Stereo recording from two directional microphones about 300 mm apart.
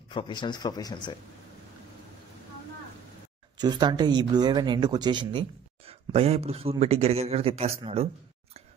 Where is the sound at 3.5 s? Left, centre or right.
Centre.